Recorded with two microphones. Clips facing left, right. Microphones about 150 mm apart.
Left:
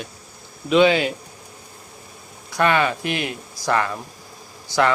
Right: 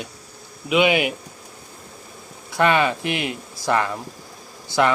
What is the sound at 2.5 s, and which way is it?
Speech, 20° right (ahead or behind).